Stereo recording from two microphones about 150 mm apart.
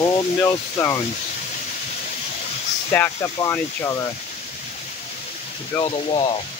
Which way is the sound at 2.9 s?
20° left (ahead or behind).